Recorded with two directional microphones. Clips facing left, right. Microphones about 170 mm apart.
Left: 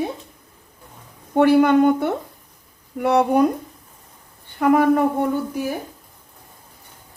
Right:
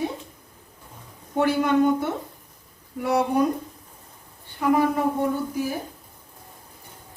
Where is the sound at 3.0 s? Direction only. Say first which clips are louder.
Left 5 dB; 60° left (ahead or behind).